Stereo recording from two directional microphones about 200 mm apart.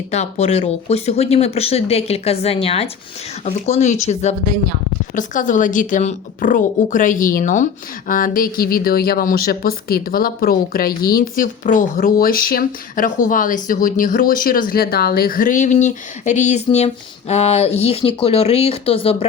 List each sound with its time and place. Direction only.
0.1 s speech: 30° left (ahead or behind)